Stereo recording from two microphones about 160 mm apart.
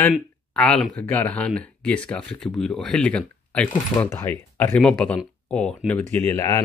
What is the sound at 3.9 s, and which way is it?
Speech, 20° left (ahead or behind).